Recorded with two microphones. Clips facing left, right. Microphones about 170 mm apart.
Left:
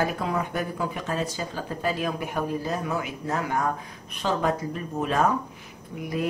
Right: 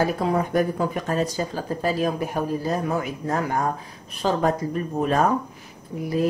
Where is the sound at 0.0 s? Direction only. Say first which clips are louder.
Right 4 dB; 40° right (ahead or behind).